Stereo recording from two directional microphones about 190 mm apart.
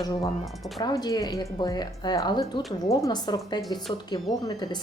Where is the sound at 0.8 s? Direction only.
20° left (ahead or behind).